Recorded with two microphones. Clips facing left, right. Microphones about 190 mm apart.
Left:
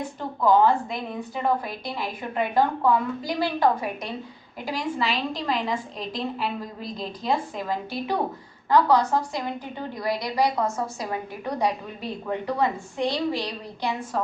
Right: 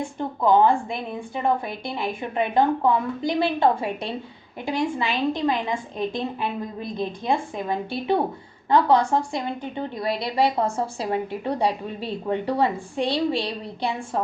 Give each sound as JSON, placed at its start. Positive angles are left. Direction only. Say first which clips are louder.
{"t": 0.0, "sound": "a woman's voice", "louder": "right 1 dB", "side_deg": -25}